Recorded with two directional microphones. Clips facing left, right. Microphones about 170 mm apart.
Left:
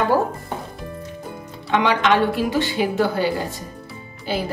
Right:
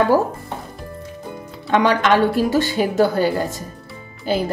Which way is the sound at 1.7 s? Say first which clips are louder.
Right 2 dB; 45° right (ahead or behind).